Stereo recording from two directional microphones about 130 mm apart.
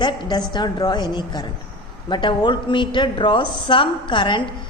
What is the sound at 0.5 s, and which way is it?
A woman's voice, 35° left (ahead or behind).